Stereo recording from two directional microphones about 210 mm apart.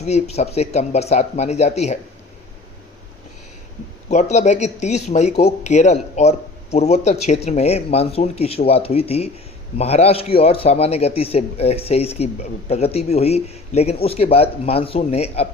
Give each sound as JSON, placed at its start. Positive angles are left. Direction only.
{"t": 0.0, "sound": "speech", "side_deg": 30}
{"t": 4.1, "sound": "a man's voice", "side_deg": 35}